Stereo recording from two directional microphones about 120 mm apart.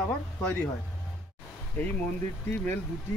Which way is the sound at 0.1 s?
15° left (ahead or behind).